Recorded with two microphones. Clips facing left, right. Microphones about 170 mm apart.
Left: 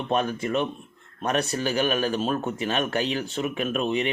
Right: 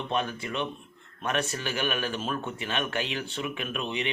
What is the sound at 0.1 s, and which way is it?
Speech, 40° left (ahead or behind).